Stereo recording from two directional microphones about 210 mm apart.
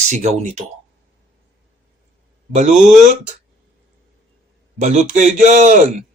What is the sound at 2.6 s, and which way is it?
Speech, 35° right (ahead or behind).